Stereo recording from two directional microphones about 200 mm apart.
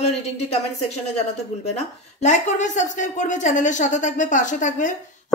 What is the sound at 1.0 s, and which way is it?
A woman's voice, 30° left (ahead or behind).